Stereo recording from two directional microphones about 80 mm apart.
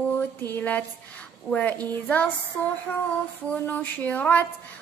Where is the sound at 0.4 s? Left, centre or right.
Left.